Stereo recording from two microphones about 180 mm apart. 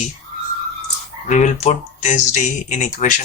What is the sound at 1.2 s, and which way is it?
Speech, 40° left (ahead or behind).